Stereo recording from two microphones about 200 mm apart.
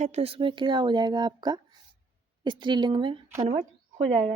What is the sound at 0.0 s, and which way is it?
Speech, 30° right (ahead or behind).